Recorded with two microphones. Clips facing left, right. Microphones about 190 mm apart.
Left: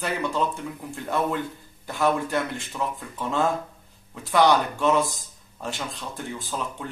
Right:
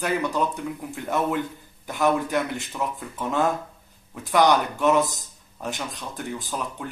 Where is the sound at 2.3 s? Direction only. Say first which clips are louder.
Right 1 dB; centre (ahead or behind).